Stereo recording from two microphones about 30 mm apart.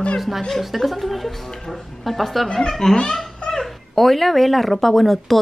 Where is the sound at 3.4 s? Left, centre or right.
Left.